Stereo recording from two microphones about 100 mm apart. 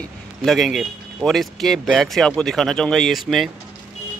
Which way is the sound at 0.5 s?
Centre (ahead or behind).